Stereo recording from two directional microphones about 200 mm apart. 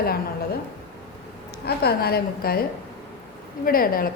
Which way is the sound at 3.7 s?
45° left (ahead or behind).